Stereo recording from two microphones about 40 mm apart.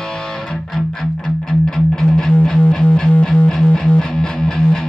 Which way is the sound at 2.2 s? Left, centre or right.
Centre.